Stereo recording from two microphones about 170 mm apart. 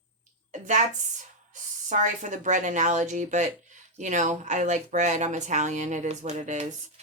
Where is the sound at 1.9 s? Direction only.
45° right (ahead or behind).